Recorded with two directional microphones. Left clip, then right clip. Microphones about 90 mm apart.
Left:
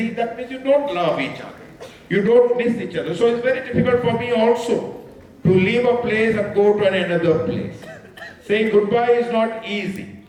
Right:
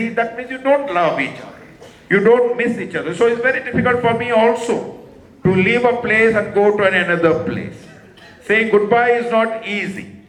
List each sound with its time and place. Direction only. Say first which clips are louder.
0.0 s a man's voice: right 4 dB; 40° right (ahead or behind)